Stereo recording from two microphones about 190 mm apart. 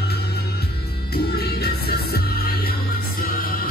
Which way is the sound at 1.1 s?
55° left (ahead or behind).